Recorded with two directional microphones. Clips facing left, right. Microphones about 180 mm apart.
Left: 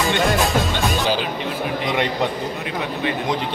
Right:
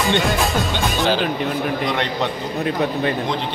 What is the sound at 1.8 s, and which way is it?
Speech, 10° left (ahead or behind).